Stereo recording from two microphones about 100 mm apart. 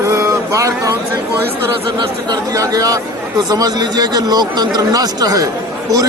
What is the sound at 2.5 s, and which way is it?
Speech, 35° right (ahead or behind).